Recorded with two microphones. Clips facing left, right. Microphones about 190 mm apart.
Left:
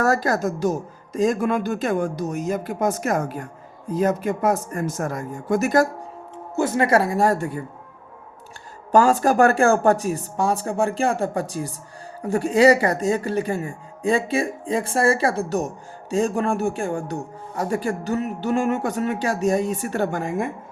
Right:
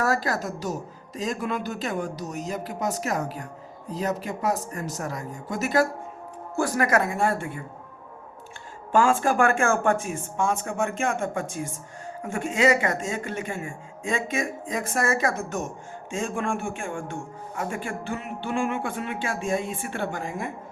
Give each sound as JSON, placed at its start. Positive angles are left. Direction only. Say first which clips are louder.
{"t": 0.0, "sound": "speech", "louder": "left 5 dB", "side_deg": 45}
{"t": 6.6, "sound": "speech", "louder": "left 4 dB", "side_deg": 25}
{"t": 8.9, "sound": "speech", "louder": "left 4 dB", "side_deg": 40}